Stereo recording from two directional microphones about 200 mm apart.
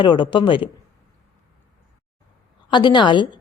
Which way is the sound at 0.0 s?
25° left (ahead or behind).